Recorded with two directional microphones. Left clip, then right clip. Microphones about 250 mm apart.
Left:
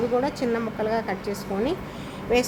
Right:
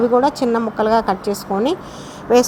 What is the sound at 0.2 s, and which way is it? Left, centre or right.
A woman's voice, right.